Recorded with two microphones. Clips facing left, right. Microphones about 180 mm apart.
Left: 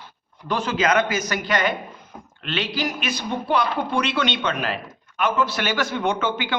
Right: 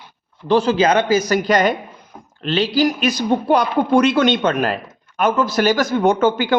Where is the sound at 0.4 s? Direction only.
30° right (ahead or behind).